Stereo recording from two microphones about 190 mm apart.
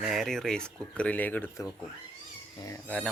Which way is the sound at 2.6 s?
15° left (ahead or behind).